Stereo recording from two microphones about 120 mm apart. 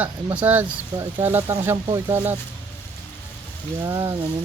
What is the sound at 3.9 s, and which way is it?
Speech, 20° right (ahead or behind).